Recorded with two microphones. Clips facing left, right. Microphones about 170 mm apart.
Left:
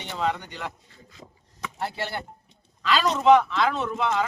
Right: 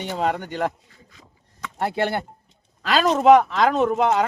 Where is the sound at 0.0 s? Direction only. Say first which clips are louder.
Right 4 dB; 50° right (ahead or behind).